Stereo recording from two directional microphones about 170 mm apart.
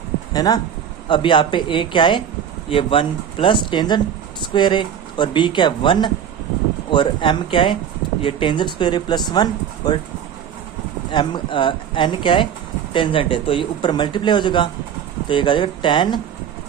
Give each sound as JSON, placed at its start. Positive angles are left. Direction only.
{"t": 0.3, "sound": "speech", "side_deg": 20}
{"t": 11.1, "sound": "speech", "side_deg": 30}